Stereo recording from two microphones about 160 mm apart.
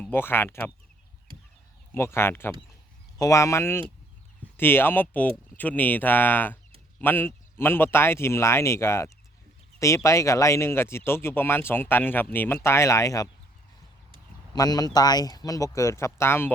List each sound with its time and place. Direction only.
0.0 s speech: 15° left (ahead or behind)
1.9 s speech: 15° left (ahead or behind)
14.5 s speech: 25° left (ahead or behind)